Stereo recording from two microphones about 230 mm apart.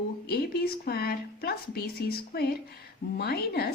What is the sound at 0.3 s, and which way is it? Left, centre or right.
A woman's voice, left.